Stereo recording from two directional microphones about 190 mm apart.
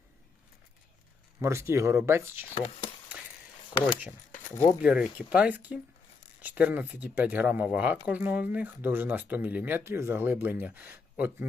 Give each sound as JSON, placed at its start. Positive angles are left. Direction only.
{"t": 1.4, "sound": "speech", "side_deg": -15}
{"t": 2.6, "sound": "speech", "side_deg": 30}
{"t": 4.5, "sound": "speech", "side_deg": 15}
{"t": 4.8, "sound": "speech", "side_deg": -5}